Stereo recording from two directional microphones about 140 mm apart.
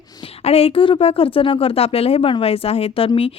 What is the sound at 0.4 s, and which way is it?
A woman's voice, 45° left (ahead or behind).